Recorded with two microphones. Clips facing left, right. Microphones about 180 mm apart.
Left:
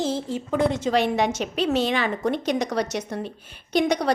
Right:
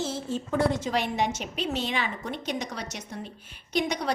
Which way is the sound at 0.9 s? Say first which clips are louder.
Left 6 dB; 75° left (ahead or behind).